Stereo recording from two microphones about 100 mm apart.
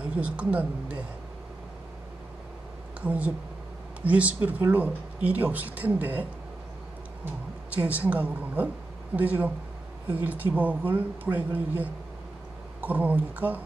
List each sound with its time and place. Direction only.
0.0 s speech: 15° right (ahead or behind)
3.0 s speech: 15° right (ahead or behind)
7.7 s speech: 15° right (ahead or behind)